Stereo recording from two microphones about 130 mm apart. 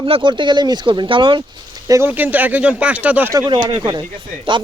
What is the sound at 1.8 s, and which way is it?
Speech, 25° right (ahead or behind).